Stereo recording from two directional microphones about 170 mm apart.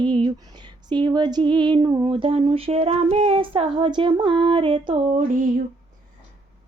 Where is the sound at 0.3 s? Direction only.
25° right (ahead or behind).